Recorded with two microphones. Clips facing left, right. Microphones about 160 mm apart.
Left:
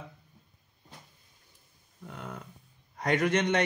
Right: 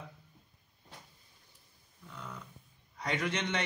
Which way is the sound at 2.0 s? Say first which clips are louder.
Left 5 dB; 55° left (ahead or behind).